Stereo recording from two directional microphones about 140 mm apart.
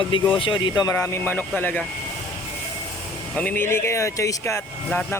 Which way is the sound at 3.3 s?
15° left (ahead or behind).